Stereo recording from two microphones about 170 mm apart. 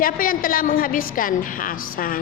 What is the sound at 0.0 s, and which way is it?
A woman's voice, 55° left (ahead or behind).